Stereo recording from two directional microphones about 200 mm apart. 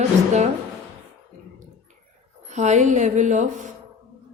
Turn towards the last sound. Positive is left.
turn(degrees=-40)  # may be behind; listen again after turning